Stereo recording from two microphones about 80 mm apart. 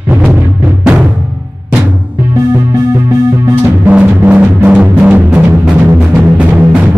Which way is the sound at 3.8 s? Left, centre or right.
Centre.